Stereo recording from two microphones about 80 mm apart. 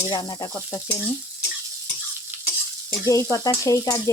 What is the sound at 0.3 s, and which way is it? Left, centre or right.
Frying, left.